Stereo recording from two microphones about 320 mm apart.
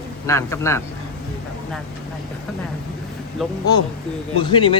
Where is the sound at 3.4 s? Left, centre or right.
Centre.